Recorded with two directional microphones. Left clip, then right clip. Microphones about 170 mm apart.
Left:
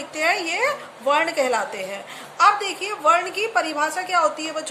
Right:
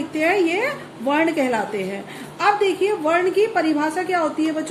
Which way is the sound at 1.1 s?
25° left (ahead or behind).